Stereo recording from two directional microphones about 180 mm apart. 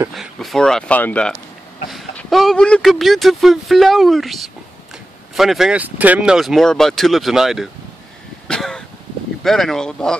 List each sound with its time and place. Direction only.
0.1 s speech: centre (ahead or behind)
8.5 s vehicle: 5° left (ahead or behind)
9.4 s speech: centre (ahead or behind)